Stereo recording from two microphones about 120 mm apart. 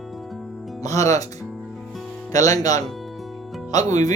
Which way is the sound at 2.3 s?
30° left (ahead or behind).